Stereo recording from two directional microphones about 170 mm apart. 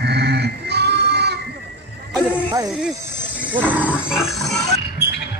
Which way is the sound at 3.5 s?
10° right (ahead or behind).